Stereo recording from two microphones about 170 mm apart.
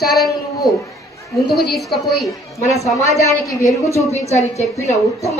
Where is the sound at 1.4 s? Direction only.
70° left (ahead or behind).